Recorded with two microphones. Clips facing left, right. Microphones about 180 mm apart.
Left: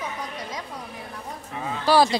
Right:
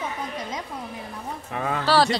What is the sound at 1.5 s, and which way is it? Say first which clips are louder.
Speech: right 4 dB; 65° right (ahead or behind).